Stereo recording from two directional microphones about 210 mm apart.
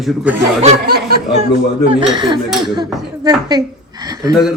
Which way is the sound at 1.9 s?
25° right (ahead or behind).